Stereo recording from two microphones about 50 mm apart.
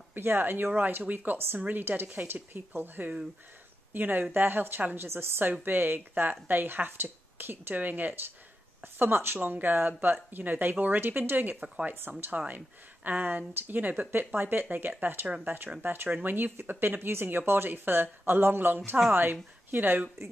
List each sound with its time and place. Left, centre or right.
0.1 s speech: right
0.7 s speech: right
5.6 s speech: right